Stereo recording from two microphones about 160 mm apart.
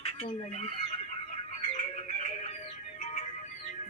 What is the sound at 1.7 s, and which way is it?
Music, 45° left (ahead or behind).